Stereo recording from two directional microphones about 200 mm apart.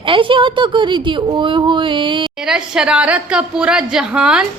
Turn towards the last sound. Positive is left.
turn(degrees=-5)  # may be behind; listen again after turning